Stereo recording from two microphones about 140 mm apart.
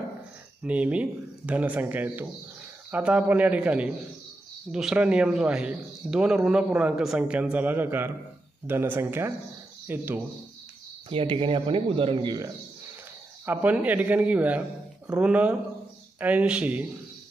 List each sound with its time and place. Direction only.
0.6 s speech: 10° right (ahead or behind)
11.1 s speech: 40° right (ahead or behind)
13.5 s speech: 10° right (ahead or behind)